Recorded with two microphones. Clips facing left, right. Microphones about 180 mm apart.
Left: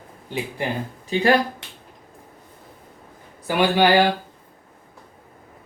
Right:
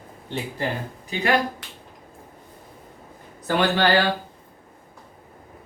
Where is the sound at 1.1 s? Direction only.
30° left (ahead or behind).